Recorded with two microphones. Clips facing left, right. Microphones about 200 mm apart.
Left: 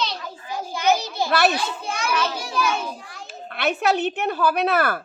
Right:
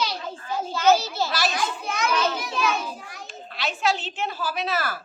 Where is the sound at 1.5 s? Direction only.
30° left (ahead or behind).